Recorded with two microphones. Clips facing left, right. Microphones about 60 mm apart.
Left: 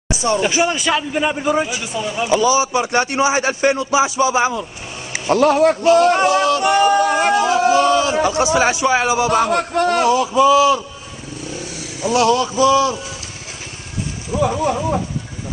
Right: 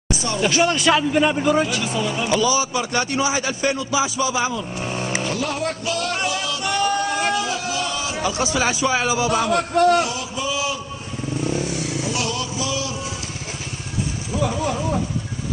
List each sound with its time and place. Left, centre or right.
0.1 s a man's voice: left
5.3 s a man's voice: left
7.1 s a sound: left
8.1 s a man's voice: left
9.8 s a man's voice: left
10.3 s a man's voice: left
12.1 s a man's voice: left
14.3 s a man's voice: centre